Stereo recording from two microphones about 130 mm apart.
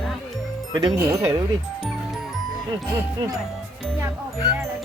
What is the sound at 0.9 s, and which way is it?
Speech, 20° right (ahead or behind).